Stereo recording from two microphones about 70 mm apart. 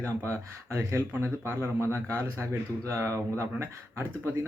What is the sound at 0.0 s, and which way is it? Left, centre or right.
Speech, right.